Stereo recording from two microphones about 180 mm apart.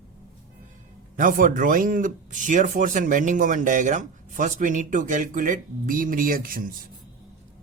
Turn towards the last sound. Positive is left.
turn(degrees=-50)  # may be behind; listen again after turning